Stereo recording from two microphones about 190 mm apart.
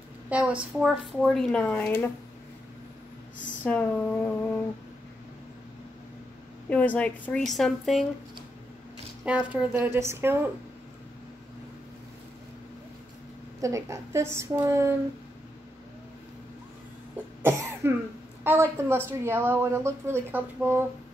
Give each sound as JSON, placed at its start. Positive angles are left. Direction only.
{"t": 0.3, "sound": "a woman's voice", "side_deg": -5}
{"t": 3.6, "sound": "speech", "side_deg": 10}
{"t": 6.7, "sound": "a woman's voice", "side_deg": 5}
{"t": 9.2, "sound": "a woman's voice", "side_deg": -5}
{"t": 13.6, "sound": "a woman's voice", "side_deg": -15}
{"t": 17.4, "sound": "cough", "side_deg": -15}
{"t": 18.4, "sound": "a woman's voice", "side_deg": -10}